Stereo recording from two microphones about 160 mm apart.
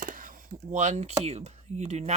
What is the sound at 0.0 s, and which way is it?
Speech, 60° right (ahead or behind).